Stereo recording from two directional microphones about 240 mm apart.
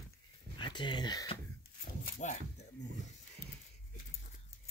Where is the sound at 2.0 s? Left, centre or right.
Left.